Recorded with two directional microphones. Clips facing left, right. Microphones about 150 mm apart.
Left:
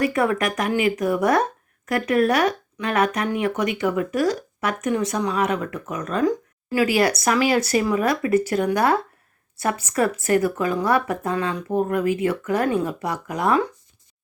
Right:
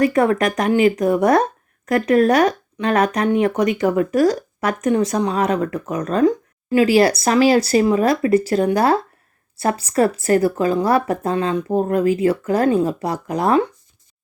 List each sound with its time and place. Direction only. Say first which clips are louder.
0.0 s speech: right 5 dB; 35° right (ahead or behind)